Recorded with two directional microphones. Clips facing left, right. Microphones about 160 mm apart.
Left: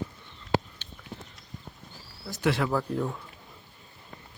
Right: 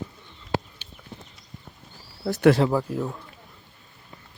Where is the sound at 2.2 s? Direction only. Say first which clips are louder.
Right 13 dB; 65° right (ahead or behind).